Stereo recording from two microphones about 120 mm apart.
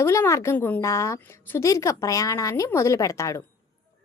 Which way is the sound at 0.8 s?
25° left (ahead or behind).